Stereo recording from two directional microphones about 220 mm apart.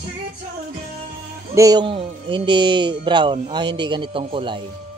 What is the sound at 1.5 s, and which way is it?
Speech, 15° right (ahead or behind).